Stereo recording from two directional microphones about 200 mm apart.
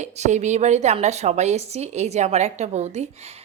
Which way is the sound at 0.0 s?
35° right (ahead or behind).